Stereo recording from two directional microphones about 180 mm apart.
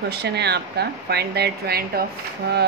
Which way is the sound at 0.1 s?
65° right (ahead or behind).